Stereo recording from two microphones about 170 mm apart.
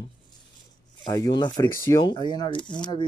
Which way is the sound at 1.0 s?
20° left (ahead or behind).